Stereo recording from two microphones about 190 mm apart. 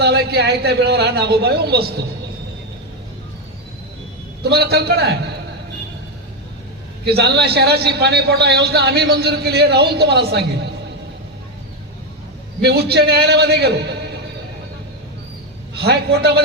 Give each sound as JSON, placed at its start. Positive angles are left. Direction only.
{"t": 0.0, "sound": "a man's voice", "side_deg": -60}
{"t": 4.4, "sound": "a man's voice", "side_deg": -55}
{"t": 7.0, "sound": "a man's voice", "side_deg": -60}
{"t": 12.6, "sound": "a man's voice", "side_deg": -60}
{"t": 15.8, "sound": "a man's voice", "side_deg": -60}